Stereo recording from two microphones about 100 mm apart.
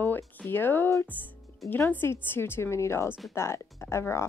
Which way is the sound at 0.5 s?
20° left (ahead or behind).